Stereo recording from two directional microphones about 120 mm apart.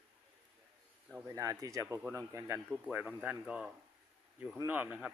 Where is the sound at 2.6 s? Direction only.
10° right (ahead or behind).